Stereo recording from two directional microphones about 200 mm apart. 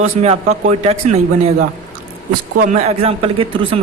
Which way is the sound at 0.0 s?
35° right (ahead or behind).